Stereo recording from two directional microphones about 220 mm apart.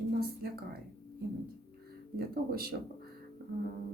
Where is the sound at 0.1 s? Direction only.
45° right (ahead or behind).